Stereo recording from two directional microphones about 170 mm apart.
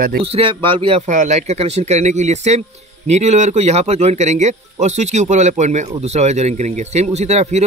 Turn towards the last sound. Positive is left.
turn(degrees=-40)  # may be behind; listen again after turning